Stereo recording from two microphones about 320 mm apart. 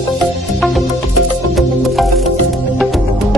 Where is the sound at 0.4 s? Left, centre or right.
Centre.